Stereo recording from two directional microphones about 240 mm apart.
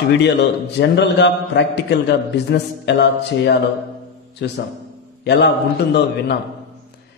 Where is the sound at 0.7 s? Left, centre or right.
Left.